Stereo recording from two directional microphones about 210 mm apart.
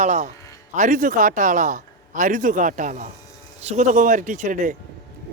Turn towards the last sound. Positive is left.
turn(degrees=-35)  # may be behind; listen again after turning